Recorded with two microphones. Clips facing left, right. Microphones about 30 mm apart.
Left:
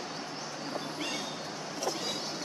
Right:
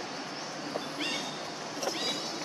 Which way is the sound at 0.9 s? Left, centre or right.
Right.